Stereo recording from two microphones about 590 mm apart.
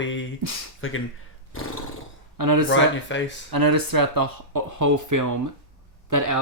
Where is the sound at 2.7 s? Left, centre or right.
Centre.